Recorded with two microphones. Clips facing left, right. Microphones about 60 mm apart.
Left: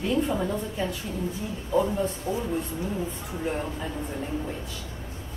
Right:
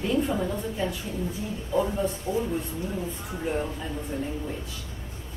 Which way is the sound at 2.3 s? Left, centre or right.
Left.